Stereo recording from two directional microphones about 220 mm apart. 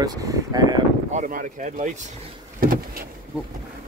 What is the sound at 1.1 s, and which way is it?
Speech, 35° right (ahead or behind).